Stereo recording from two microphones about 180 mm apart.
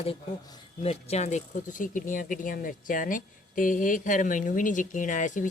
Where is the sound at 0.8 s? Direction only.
35° left (ahead or behind).